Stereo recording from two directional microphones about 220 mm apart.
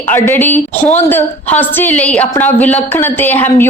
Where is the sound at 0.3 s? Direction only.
10° left (ahead or behind).